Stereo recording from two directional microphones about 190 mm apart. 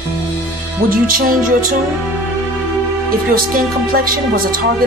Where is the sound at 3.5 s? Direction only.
50° right (ahead or behind).